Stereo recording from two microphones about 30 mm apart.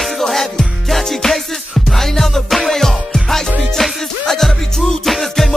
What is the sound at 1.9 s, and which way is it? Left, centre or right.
Music, centre.